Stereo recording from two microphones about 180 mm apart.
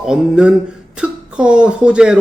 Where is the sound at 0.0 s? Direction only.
5° right (ahead or behind).